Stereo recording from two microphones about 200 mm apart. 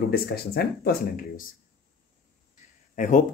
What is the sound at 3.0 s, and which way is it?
Speech, 40° left (ahead or behind).